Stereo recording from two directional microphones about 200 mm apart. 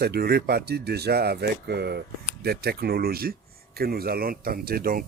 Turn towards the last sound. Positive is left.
turn(degrees=-45)  # may be behind; listen again after turning